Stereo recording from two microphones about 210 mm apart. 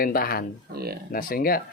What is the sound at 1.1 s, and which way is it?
Speech, 45° left (ahead or behind).